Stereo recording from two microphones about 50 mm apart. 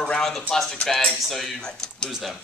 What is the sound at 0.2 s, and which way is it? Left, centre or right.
Speech, centre.